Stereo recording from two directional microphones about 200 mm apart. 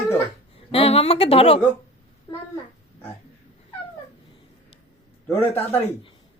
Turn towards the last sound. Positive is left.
turn(degrees=10)  # may be behind; listen again after turning